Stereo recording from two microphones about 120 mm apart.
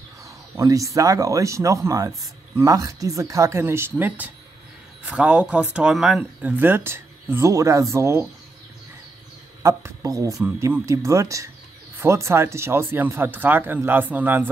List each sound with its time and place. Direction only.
0.6 s speech: 25° right (ahead or behind); by 6.2 s 5° right (ahead or behind)
6.4 s speech: 15° right (ahead or behind)
9.6 s speech: 25° right (ahead or behind)